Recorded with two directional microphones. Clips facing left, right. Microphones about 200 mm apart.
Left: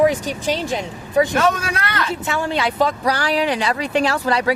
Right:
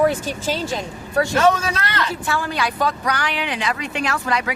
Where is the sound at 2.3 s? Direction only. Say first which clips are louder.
Left 4 dB; 25° left (ahead or behind).